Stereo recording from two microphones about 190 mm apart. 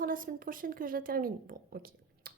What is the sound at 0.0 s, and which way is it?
A woman's voice, 45° right (ahead or behind).